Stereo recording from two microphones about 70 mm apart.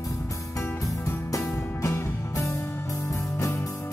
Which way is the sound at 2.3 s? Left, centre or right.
Left.